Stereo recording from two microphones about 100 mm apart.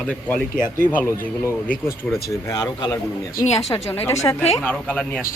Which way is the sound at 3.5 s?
25° left (ahead or behind).